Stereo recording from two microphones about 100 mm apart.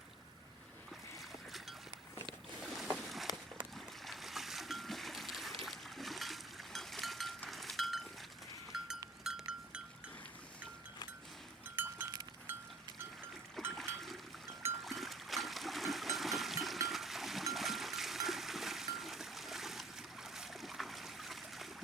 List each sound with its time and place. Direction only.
2.7 s boat: centre (ahead or behind)
7.5 s livestock: centre (ahead or behind)
8.7 s goat: 5° right (ahead or behind)
11.8 s goat: 20° right (ahead or behind)
13.7 s livestock: centre (ahead or behind)
14.8 s a sound: centre (ahead or behind)